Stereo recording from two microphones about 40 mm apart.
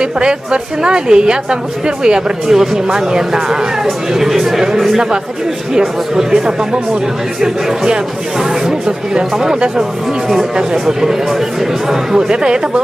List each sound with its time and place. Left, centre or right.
0.0 s a woman's voice: right; by 4.6 s centre
5.7 s speech: centre
9.1 s speech: centre
10.8 s a woman's voice: centre